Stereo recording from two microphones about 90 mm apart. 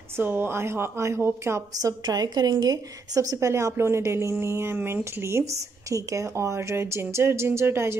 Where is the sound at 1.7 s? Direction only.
45° right (ahead or behind).